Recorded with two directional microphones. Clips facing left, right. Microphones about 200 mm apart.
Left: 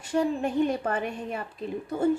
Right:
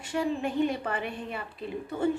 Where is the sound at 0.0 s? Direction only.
40° left (ahead or behind).